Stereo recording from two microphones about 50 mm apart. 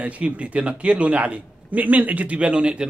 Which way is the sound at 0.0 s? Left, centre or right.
Right.